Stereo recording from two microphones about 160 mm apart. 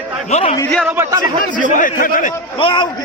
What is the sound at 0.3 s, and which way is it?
Speech, 45° left (ahead or behind).